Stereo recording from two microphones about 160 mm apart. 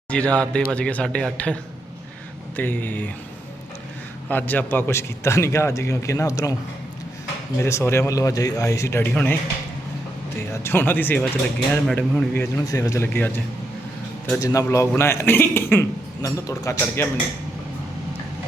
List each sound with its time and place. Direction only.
0.1 s a man's voice: 5° left (ahead or behind)
2.6 s a man's voice: 10° left (ahead or behind)
4.3 s a man's voice: 10° left (ahead or behind)
7.6 s a man's voice: 15° left (ahead or behind)
10.5 s a man's voice: 15° left (ahead or behind)
14.4 s a man's voice: 20° left (ahead or behind)